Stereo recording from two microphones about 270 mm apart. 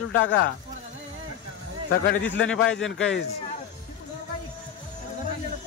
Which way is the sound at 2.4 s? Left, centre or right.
Centre.